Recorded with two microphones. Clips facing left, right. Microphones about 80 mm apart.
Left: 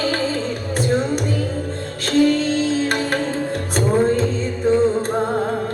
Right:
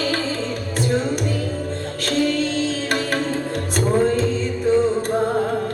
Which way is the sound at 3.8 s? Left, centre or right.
Left.